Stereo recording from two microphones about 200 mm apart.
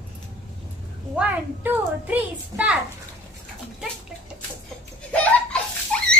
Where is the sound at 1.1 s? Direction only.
10° right (ahead or behind).